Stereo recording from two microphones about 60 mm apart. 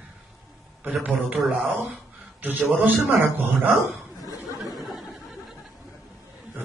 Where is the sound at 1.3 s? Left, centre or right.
Centre.